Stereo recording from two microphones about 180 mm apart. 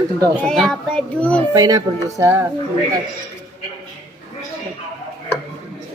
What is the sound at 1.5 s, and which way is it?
Speech, 20° right (ahead or behind).